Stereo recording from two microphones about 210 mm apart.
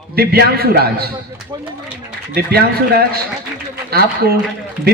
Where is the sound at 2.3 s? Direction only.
50° right (ahead or behind).